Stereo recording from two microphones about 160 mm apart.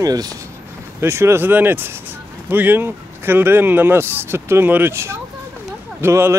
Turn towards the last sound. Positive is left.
turn(degrees=-15)  # may be behind; listen again after turning